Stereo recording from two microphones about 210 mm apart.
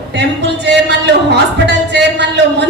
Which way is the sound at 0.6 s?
55° right (ahead or behind).